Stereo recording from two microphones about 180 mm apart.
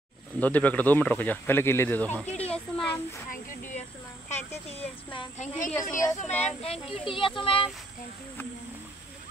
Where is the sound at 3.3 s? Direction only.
45° left (ahead or behind).